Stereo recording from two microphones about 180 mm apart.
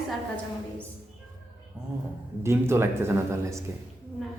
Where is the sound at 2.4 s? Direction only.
15° right (ahead or behind).